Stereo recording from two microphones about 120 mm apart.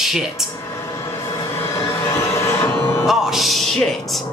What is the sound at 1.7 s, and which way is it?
Music, 20° left (ahead or behind).